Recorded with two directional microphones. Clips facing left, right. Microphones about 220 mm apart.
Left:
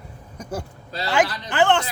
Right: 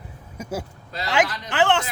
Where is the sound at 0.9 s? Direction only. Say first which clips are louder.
Left 1 dB; 35° left (ahead or behind).